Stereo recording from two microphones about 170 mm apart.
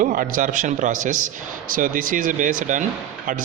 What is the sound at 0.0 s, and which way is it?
A man's voice, 55° right (ahead or behind).